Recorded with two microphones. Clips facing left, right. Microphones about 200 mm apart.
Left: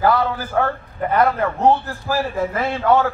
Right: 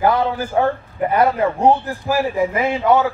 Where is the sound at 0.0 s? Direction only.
20° right (ahead or behind).